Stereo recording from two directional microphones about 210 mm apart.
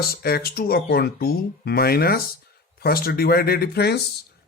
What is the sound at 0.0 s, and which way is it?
Speech, 45° left (ahead or behind).